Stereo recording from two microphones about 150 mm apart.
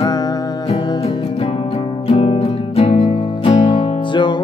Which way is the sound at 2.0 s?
40° left (ahead or behind).